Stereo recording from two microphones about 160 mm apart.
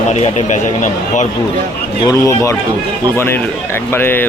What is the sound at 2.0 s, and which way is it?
A man's voice, 20° left (ahead or behind).